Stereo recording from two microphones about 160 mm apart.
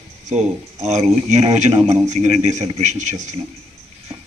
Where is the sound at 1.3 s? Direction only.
45° right (ahead or behind).